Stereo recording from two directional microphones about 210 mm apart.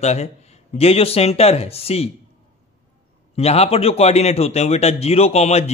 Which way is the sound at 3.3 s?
30° left (ahead or behind).